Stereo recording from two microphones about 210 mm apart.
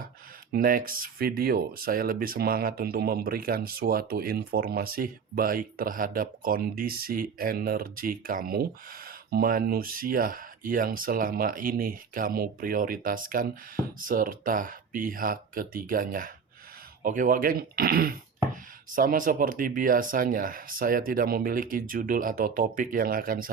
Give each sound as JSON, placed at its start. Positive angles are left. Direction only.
{"t": 0.5, "sound": "speech", "side_deg": -45}